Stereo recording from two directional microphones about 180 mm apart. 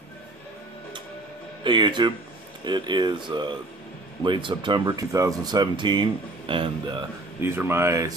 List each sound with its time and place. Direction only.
1.6 s speech: 25° right (ahead or behind)
7.4 s speech: 15° right (ahead or behind)